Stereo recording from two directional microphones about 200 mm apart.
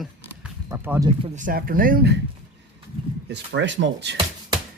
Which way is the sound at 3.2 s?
60° right (ahead or behind).